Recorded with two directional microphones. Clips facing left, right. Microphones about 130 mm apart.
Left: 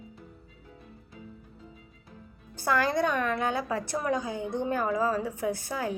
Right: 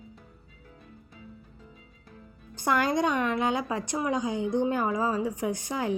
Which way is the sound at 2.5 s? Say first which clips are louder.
Right 1 dB; 20° right (ahead or behind).